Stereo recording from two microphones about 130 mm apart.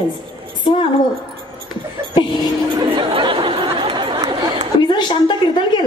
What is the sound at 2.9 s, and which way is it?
Chatter, 45° right (ahead or behind).